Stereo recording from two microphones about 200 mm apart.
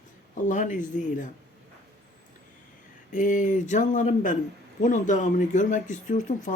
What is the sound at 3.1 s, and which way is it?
Speech, 40° left (ahead or behind).